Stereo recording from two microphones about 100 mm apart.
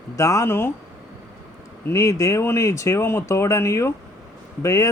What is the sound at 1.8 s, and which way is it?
A man's voice, 30° left (ahead or behind).